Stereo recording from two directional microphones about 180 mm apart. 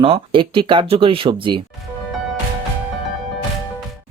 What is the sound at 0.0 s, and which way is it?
Speech, 30° right (ahead or behind).